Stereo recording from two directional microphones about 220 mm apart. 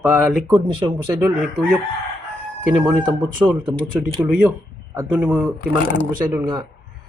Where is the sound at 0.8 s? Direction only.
10° right (ahead or behind).